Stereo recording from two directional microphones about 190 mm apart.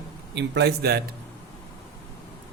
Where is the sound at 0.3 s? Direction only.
65° right (ahead or behind).